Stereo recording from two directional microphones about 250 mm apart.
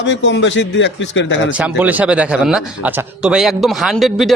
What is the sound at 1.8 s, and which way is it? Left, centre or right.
A man's voice, centre.